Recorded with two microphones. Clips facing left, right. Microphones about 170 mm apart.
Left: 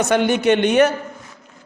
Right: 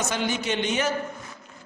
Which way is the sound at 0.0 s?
60° left (ahead or behind).